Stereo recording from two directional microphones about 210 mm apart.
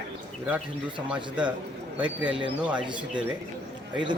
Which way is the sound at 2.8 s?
20° right (ahead or behind).